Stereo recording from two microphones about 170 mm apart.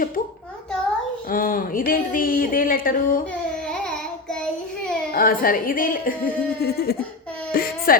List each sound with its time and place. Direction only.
1.3 s speech: 55° left (ahead or behind)
5.1 s speech: 55° left (ahead or behind)
7.5 s a sound: 60° left (ahead or behind)